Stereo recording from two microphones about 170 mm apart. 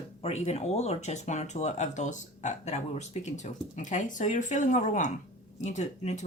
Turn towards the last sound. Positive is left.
turn(degrees=45)  # may be behind; listen again after turning